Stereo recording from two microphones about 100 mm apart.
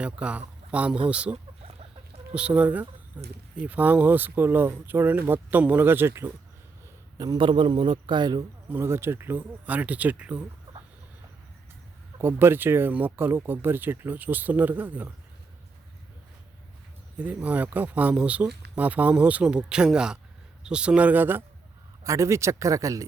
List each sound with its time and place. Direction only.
0.0 s speech: 10° right (ahead or behind)
2.1 s chicken: 90° right
2.6 s speech: 15° right (ahead or behind)
7.2 s a man's voice: 50° right (ahead or behind)
8.7 s speech: 25° right (ahead or behind)
12.2 s speech: 20° right (ahead or behind)
17.2 s speech: 15° right (ahead or behind)
22.0 s speech: 30° right (ahead or behind)